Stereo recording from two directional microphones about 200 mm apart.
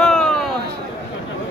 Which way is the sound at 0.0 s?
Centre (ahead or behind).